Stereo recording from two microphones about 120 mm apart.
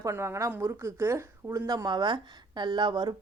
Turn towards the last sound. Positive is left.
turn(degrees=-40)  # may be behind; listen again after turning